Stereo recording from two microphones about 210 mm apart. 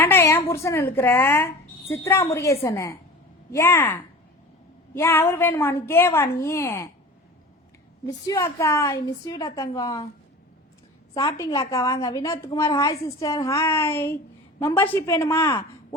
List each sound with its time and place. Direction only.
0.0 s a woman's voice: 10° left (ahead or behind)
8.3 s a woman's voice: 15° left (ahead or behind)
11.1 s a woman's voice: 15° left (ahead or behind)